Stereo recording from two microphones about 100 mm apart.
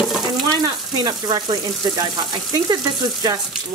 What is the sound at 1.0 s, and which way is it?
Speech, 45° right (ahead or behind).